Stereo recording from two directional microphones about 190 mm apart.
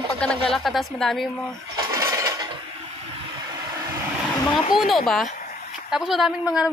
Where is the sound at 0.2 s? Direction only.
5° left (ahead or behind).